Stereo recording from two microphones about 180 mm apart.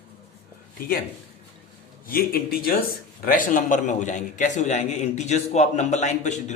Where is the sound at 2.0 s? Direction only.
55° left (ahead or behind).